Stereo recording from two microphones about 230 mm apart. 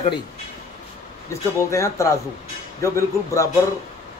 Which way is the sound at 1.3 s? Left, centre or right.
Centre.